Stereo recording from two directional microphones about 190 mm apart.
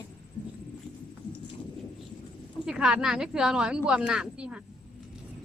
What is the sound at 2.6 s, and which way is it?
A woman's voice, 5° right (ahead or behind).